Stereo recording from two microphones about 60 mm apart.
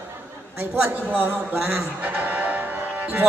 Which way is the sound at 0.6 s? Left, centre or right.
Right.